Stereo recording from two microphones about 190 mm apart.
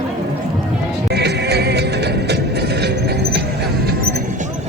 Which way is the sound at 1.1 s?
60° right (ahead or behind).